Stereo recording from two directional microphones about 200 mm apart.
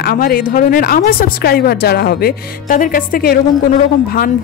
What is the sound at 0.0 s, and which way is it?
Speech, 50° left (ahead or behind).